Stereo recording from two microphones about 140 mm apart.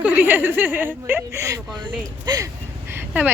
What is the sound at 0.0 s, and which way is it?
Speech, 10° right (ahead or behind).